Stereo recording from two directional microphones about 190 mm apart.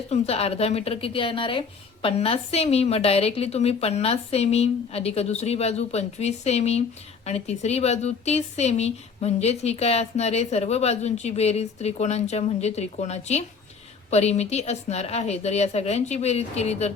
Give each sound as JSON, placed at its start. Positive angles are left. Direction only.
{"t": 0.1, "sound": "a woman's voice", "side_deg": 30}